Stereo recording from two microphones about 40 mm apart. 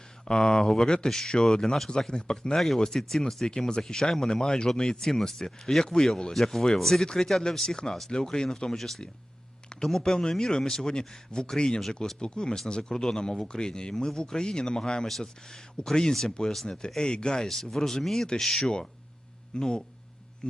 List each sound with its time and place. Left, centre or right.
0.3 s speech: centre
0.7 s speech: centre
3.4 s speech: centre
19.5 s speech: centre